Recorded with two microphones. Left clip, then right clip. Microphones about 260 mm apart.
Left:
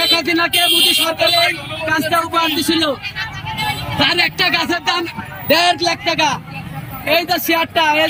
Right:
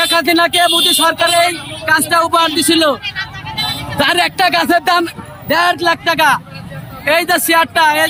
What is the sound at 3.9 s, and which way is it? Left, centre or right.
Speech, centre.